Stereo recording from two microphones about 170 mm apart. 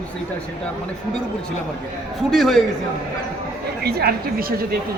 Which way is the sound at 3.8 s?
65° right (ahead or behind).